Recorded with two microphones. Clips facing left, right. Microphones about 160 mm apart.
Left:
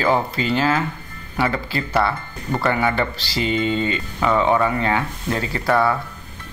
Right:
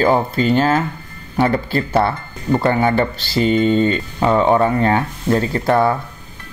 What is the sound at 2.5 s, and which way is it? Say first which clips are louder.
Speech: right 5 dB; 30° right (ahead or behind).